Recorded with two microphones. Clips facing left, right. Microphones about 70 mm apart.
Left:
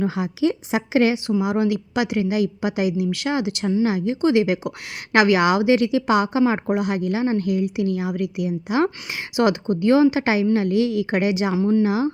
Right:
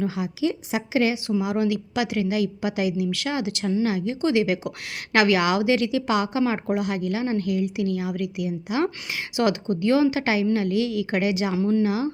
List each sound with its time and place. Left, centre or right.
0.0 s a woman's voice: left
1.3 s speech: left
11.5 s speech: centre
11.8 s speech: left